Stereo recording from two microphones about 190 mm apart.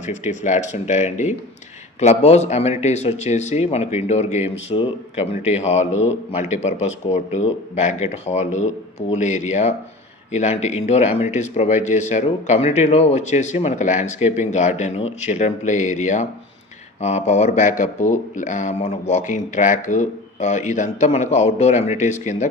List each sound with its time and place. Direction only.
0.0 s speech: 40° left (ahead or behind)